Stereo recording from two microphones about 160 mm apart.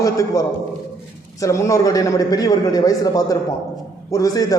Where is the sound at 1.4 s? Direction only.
20° left (ahead or behind).